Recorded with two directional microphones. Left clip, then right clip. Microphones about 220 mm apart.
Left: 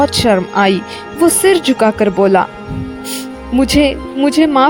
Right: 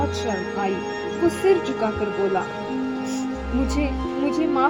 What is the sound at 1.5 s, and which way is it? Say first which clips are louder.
Music: left 8 dB; 45° left (ahead or behind).